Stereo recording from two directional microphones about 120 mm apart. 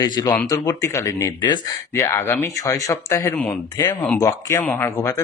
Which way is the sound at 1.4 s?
35° left (ahead or behind).